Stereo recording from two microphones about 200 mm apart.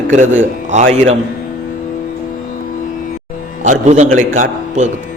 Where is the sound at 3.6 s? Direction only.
35° right (ahead or behind).